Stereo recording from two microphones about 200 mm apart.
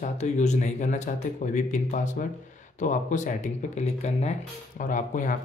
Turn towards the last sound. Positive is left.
turn(degrees=40)  # may be behind; listen again after turning